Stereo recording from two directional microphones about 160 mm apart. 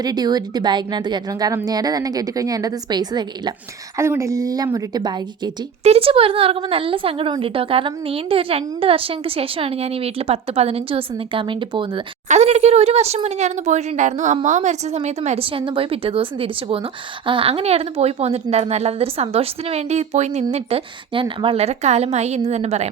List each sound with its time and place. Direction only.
0.0 s a woman's voice: 25° right (ahead or behind)
5.8 s a woman's voice: 40° right (ahead or behind)
12.3 s a woman's voice: 45° right (ahead or behind)